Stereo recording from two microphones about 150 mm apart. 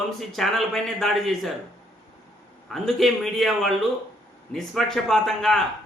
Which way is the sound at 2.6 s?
Centre (ahead or behind).